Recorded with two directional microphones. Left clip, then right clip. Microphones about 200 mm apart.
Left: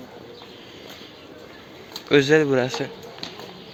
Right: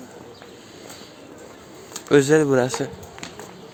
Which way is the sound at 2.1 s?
30° right (ahead or behind).